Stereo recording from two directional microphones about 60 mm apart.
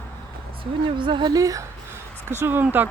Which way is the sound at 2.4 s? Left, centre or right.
Right.